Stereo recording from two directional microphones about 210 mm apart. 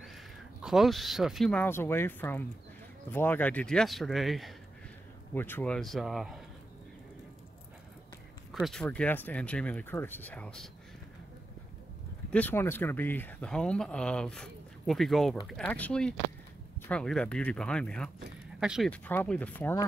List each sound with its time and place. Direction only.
0.0 s speech: centre (ahead or behind)
8.5 s speech: centre (ahead or behind)
12.3 s speech: 10° left (ahead or behind)